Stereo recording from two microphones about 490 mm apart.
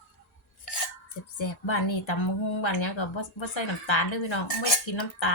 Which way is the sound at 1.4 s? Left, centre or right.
Left.